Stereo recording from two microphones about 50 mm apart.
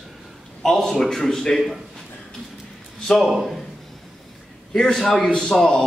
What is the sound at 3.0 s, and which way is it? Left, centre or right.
Speech, centre.